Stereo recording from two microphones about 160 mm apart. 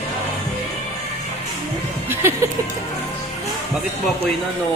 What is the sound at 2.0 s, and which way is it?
Music, 15° right (ahead or behind).